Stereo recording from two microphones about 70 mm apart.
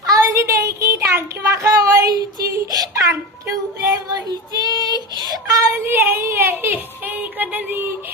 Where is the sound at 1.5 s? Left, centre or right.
Right.